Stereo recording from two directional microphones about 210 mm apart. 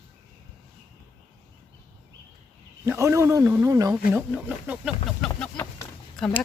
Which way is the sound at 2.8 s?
15° right (ahead or behind).